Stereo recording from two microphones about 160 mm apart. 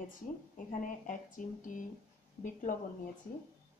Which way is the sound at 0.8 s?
55° left (ahead or behind).